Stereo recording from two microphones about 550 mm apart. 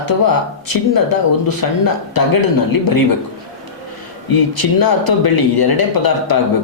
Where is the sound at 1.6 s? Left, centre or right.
Left.